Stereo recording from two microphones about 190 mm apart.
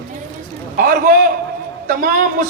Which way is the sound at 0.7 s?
45° right (ahead or behind).